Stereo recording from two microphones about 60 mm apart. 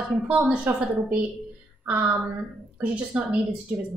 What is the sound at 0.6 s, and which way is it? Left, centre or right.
A woman's voice, right.